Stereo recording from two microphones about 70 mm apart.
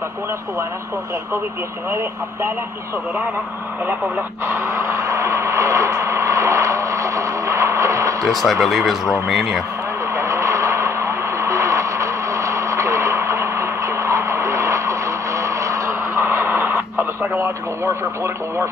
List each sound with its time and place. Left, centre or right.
1.9 s speech: right
4.5 s vehicle: right
8.3 s speech: centre
10.1 s vehicle: right